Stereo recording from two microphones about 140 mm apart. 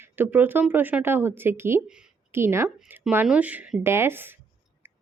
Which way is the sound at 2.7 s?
5° right (ahead or behind).